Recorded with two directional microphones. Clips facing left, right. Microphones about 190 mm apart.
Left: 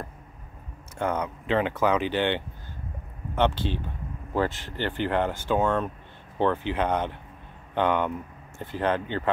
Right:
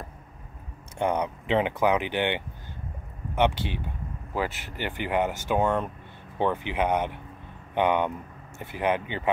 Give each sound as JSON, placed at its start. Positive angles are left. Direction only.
{"t": 0.9, "sound": "speech", "side_deg": -15}